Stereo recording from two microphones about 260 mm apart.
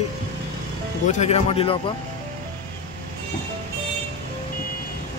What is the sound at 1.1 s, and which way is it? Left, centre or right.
Speech, left.